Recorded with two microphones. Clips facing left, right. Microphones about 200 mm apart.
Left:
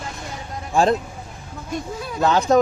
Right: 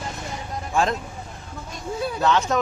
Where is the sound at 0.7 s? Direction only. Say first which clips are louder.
Left 5 dB; 35° left (ahead or behind).